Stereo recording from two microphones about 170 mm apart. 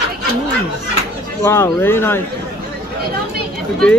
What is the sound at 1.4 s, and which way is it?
Speech, 15° left (ahead or behind).